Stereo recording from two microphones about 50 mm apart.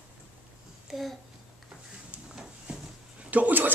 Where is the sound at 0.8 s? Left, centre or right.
Centre.